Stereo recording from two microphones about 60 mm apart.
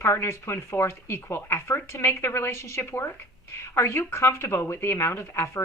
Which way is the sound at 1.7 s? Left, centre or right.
Left.